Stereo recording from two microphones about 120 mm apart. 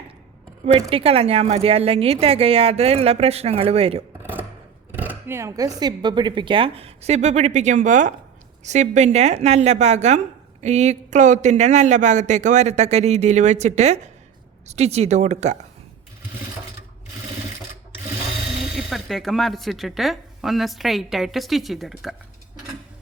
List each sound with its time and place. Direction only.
0.9 s a woman's voice: 50° right (ahead or behind)
4.2 s a sound: 15° right (ahead or behind)
4.9 s speech: 15° right (ahead or behind); by 8.1 s 90° right
8.6 s speech: 80° right
18.6 s speech: centre (ahead or behind)